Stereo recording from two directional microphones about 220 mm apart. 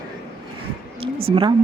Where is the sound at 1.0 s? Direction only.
25° right (ahead or behind).